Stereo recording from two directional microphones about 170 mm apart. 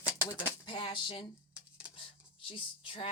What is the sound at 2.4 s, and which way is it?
Speech, 30° left (ahead or behind).